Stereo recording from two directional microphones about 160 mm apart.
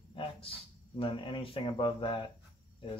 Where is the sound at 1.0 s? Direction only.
30° left (ahead or behind).